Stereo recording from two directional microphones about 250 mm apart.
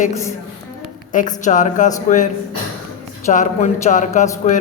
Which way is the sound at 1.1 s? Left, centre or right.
Left.